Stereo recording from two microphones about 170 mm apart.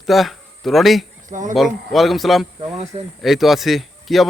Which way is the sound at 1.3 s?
50° right (ahead or behind).